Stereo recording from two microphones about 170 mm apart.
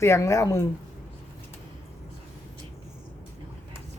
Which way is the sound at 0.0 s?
15° left (ahead or behind).